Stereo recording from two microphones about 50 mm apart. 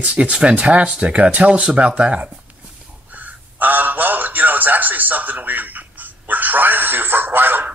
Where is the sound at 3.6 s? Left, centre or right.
Right.